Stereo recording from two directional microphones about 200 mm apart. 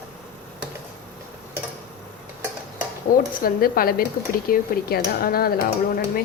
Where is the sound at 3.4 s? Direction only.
45° left (ahead or behind).